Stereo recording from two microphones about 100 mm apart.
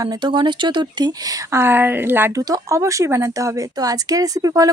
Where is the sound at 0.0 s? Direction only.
45° right (ahead or behind); by 2.3 s 20° right (ahead or behind).